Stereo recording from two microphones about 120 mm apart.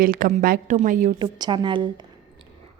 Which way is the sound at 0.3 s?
85° right.